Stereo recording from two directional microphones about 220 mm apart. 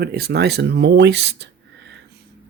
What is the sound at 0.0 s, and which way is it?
Speech, 45° right (ahead or behind).